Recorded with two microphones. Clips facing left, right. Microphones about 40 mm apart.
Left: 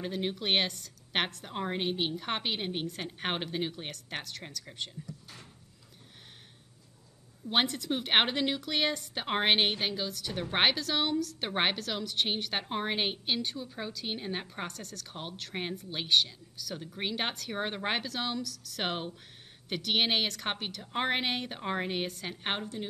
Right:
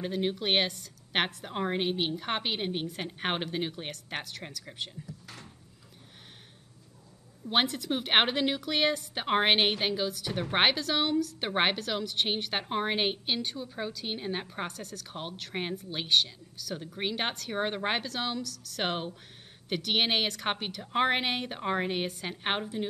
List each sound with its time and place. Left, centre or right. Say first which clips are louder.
0.0 s a woman's voice: right 3 dB; centre
7.4 s a woman's voice: right 1 dB; centre